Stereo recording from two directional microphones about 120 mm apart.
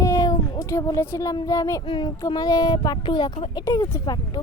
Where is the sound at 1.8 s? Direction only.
40° left (ahead or behind).